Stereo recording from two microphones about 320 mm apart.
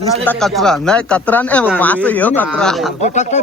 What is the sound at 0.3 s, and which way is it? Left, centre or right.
A man's voice, centre.